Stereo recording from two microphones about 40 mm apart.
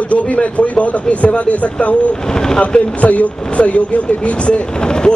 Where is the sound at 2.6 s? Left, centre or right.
Left.